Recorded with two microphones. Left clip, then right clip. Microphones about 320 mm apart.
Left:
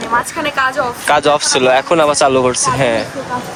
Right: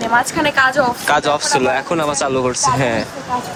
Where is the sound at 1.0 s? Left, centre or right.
Centre.